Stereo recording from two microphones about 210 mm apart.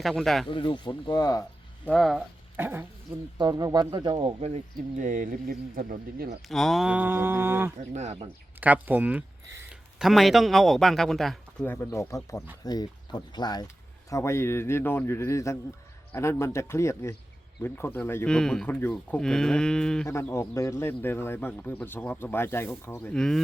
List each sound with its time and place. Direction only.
0.0 s speech: centre (ahead or behind)
0.4 s speech: 25° left (ahead or behind)
1.9 s speech: centre (ahead or behind)
2.6 s mantra: 10° right (ahead or behind)
3.3 s speech: 20° right (ahead or behind); by 6.4 s 40° right (ahead or behind)
6.5 s mantra: centre (ahead or behind)
7.9 s speech: 30° right (ahead or behind)
8.6 s a man's voice: 10° right (ahead or behind)